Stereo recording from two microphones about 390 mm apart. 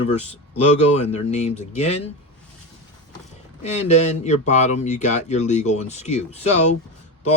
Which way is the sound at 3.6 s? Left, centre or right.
Centre.